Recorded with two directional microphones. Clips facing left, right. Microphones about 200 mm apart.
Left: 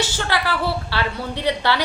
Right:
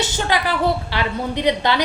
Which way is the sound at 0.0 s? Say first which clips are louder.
Right 2 dB; 20° right (ahead or behind).